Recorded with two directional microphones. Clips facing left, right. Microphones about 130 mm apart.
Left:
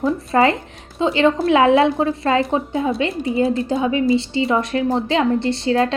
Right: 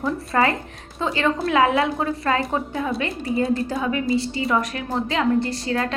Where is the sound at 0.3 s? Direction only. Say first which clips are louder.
Left 4 dB; 25° left (ahead or behind).